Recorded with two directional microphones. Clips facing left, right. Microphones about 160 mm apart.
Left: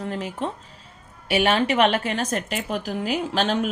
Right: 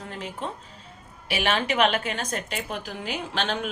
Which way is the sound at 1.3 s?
35° left (ahead or behind).